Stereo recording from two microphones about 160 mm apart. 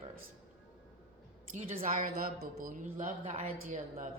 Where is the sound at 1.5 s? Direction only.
60° right (ahead or behind).